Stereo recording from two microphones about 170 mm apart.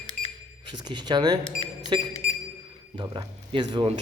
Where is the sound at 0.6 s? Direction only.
25° right (ahead or behind).